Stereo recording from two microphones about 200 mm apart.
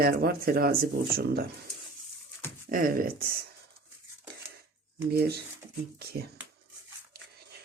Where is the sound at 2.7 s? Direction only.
45° right (ahead or behind).